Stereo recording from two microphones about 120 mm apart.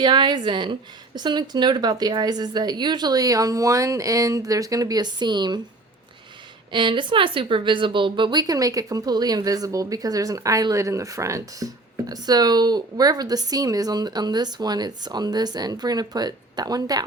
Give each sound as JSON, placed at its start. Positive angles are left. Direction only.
{"t": 0.0, "sound": "speech", "side_deg": -40}
{"t": 6.7, "sound": "speech", "side_deg": -40}